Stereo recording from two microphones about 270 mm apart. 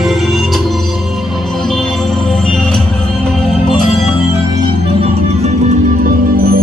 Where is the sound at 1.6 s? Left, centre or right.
Centre.